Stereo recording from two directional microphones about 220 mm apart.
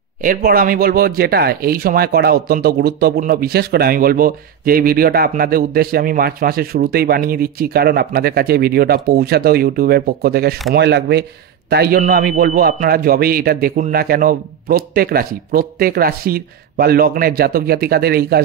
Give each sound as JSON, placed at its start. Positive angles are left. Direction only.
{"t": 0.2, "sound": "speech", "side_deg": -40}